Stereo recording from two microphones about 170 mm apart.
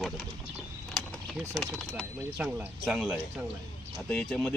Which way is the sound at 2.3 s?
10° right (ahead or behind).